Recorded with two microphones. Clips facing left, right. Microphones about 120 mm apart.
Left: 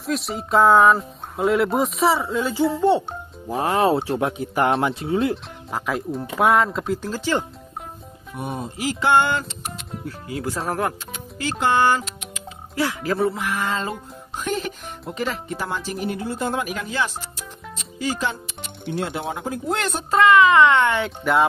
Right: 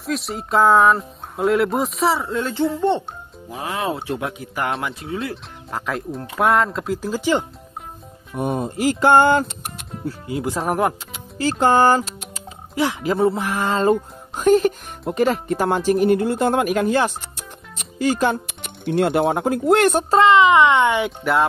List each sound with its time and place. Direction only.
0.0 s speech: centre (ahead or behind)
3.1 s speech: 40° left (ahead or behind)
5.7 s speech: centre (ahead or behind)
7.1 s speech: 15° right (ahead or behind)
8.4 s speech: 45° right (ahead or behind)
10.0 s speech: 25° right (ahead or behind)
11.3 s speech: 40° right (ahead or behind)
12.7 s speech: 20° right (ahead or behind); by 20.1 s 60° right (ahead or behind)
20.1 s speech: 25° right (ahead or behind)
21.2 s speech: centre (ahead or behind)